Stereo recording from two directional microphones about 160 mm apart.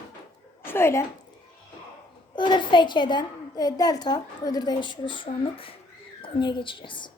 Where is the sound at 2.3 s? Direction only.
30° left (ahead or behind).